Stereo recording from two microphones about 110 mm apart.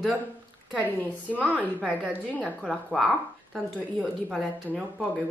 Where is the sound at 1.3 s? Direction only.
15° right (ahead or behind).